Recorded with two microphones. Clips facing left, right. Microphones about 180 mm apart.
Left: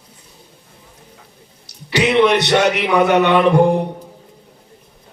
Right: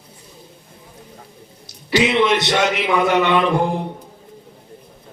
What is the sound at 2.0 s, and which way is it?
Speech, 60° left (ahead or behind).